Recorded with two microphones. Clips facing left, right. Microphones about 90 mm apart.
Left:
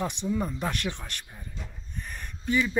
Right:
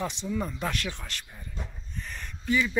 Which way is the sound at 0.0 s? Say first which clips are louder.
Left 2 dB; 20° left (ahead or behind).